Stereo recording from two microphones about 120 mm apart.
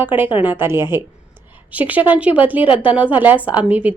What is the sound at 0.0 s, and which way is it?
A woman's voice, 15° right (ahead or behind).